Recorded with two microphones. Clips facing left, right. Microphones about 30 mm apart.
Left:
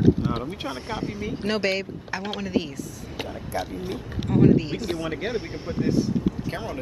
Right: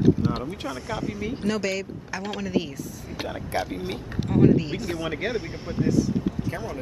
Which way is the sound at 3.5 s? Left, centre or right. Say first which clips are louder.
Right 1 dB; right.